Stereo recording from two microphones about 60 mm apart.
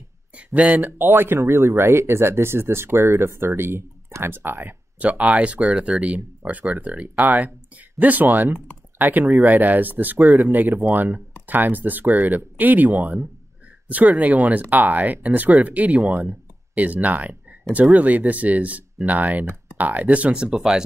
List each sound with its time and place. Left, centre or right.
0.4 s speech: right
4.9 s speech: right
20.5 s speech: centre